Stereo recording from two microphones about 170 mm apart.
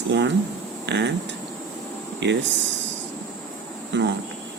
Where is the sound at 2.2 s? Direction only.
90° right.